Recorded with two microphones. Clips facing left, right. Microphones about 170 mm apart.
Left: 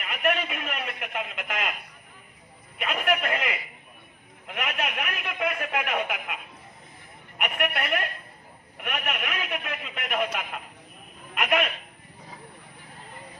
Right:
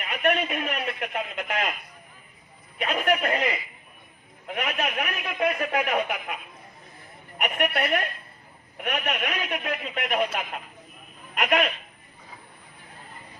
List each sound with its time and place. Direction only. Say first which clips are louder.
0.0 s speech: right 2 dB; 35° right (ahead or behind)
2.7 s speech: right 2 dB; 35° right (ahead or behind)
11.3 s speech: right 1 dB; 35° right (ahead or behind)